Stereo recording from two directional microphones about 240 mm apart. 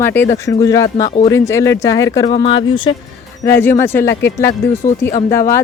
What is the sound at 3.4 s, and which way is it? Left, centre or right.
Speech, centre.